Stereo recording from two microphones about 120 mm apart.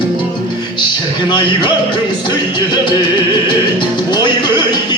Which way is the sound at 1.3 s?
40° left (ahead or behind).